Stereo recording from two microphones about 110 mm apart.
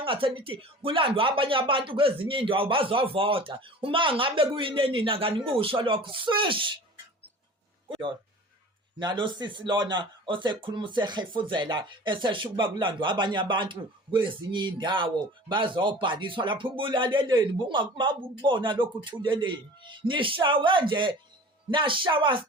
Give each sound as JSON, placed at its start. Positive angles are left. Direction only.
{"t": 0.0, "sound": "speech", "side_deg": -55}
{"t": 7.9, "sound": "speech", "side_deg": -50}